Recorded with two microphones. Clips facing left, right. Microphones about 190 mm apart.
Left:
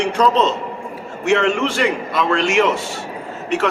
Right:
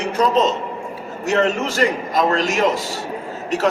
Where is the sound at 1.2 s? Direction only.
40° right (ahead or behind).